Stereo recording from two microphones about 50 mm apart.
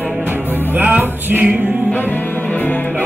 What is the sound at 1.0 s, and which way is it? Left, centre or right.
Music, right.